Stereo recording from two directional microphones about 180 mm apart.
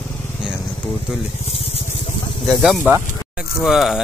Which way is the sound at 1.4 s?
35° left (ahead or behind).